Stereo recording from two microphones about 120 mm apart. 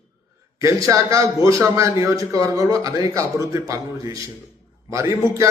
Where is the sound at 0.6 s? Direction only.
25° right (ahead or behind).